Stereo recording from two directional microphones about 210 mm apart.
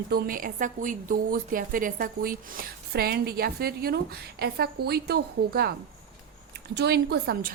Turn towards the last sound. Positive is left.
turn(degrees=-50)  # may be behind; listen again after turning